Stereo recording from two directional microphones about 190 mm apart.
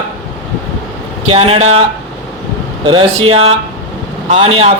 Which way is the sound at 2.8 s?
25° right (ahead or behind).